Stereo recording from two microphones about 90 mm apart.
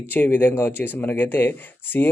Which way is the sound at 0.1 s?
20° left (ahead or behind).